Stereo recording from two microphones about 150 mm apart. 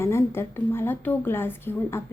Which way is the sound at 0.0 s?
15° left (ahead or behind).